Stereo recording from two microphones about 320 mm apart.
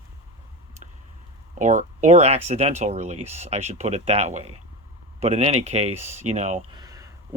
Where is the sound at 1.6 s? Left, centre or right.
Right.